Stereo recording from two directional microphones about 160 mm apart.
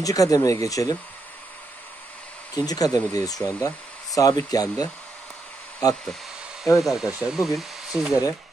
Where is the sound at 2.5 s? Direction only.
25° left (ahead or behind).